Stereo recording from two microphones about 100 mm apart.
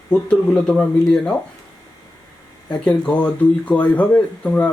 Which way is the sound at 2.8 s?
10° left (ahead or behind).